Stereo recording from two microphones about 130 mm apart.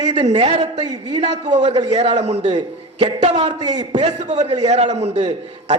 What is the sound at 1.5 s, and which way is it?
A man's voice, 60° right (ahead or behind).